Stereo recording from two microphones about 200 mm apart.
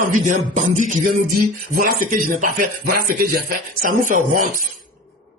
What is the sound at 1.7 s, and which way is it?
Speech, 45° right (ahead or behind).